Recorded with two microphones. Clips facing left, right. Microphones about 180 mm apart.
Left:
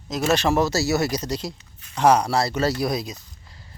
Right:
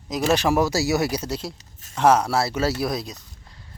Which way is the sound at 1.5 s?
45° right (ahead or behind).